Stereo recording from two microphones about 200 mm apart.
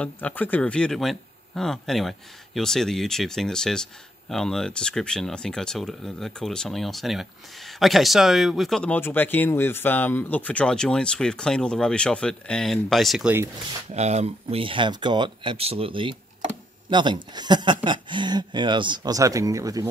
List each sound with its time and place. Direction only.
0.0 s speech: 10° left (ahead or behind)
13.9 s speech: 35° right (ahead or behind); by 19.9 s 15° right (ahead or behind)